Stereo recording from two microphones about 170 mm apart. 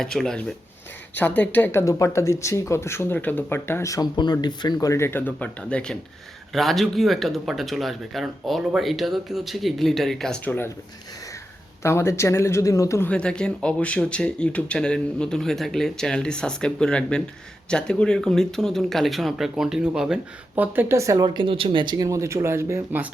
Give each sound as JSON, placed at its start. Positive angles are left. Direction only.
{"t": 0.0, "sound": "speech", "side_deg": 0}
{"t": 11.8, "sound": "speech", "side_deg": 15}
{"t": 13.1, "sound": "speech", "side_deg": 5}
{"t": 21.2, "sound": "speech", "side_deg": -30}